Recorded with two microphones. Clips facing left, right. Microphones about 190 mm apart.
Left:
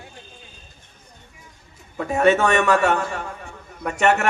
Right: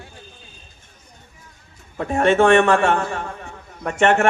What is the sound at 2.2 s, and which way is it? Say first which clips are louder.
Speech: right 3 dB; 40° left (ahead or behind).